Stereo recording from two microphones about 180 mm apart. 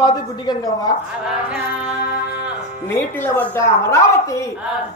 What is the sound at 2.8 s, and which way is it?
A woman's voice, 10° left (ahead or behind).